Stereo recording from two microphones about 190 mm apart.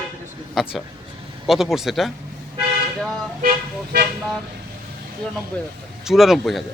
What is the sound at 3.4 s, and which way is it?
Speech, 50° right (ahead or behind).